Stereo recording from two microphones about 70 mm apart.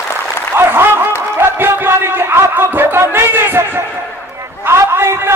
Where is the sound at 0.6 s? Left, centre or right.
Right.